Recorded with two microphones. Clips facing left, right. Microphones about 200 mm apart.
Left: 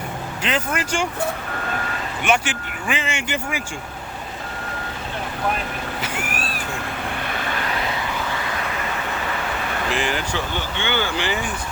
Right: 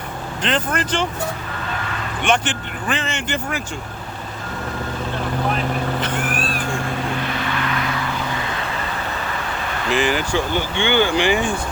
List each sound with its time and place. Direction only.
0.4 s speech: 10° left (ahead or behind)
2.2 s speech: 10° left (ahead or behind)
6.0 s vehicle: 10° left (ahead or behind)
9.9 s speech: centre (ahead or behind)
10.8 s speech: 15° right (ahead or behind)